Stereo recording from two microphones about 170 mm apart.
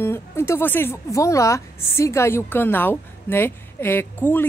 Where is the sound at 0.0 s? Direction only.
15° left (ahead or behind).